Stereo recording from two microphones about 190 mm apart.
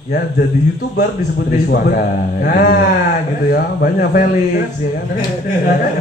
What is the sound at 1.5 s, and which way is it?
A man's voice, 50° left (ahead or behind).